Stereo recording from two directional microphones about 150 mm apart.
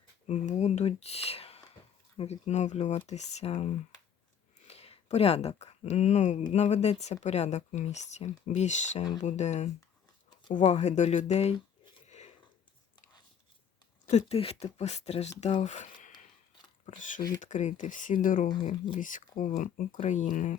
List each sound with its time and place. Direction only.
0.3 s speech: 50° left (ahead or behind)
11.9 s a sound: 50° left (ahead or behind)
14.1 s speech: 45° left (ahead or behind)
17.4 s speech: 55° left (ahead or behind)